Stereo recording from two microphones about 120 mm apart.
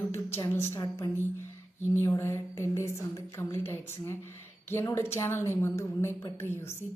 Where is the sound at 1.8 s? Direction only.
20° left (ahead or behind).